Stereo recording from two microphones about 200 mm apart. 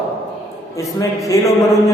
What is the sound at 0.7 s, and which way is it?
Speech, 15° left (ahead or behind).